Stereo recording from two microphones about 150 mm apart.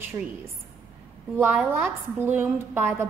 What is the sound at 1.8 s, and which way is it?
A woman's voice, 15° right (ahead or behind).